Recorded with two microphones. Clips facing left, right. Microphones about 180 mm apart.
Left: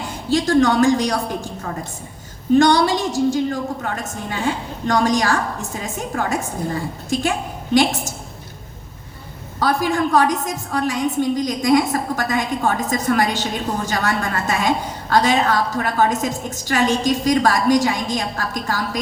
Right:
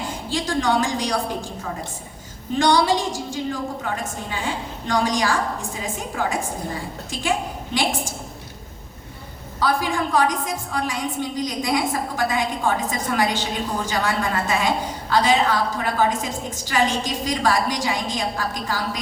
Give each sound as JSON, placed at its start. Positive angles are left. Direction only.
{"t": 0.3, "sound": "a woman's voice", "side_deg": 45}
{"t": 2.6, "sound": "a woman's voice", "side_deg": 45}
{"t": 9.6, "sound": "a woman's voice", "side_deg": 45}